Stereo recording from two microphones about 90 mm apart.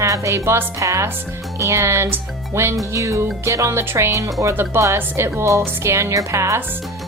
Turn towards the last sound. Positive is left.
turn(degrees=-35)  # may be behind; listen again after turning